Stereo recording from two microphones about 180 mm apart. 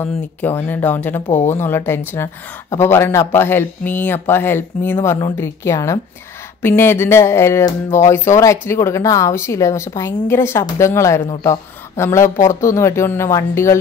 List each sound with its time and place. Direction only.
0.0 s speech: 10° left (ahead or behind)
1.3 s speech: 40° left (ahead or behind)
1.6 s speech: 15° left (ahead or behind)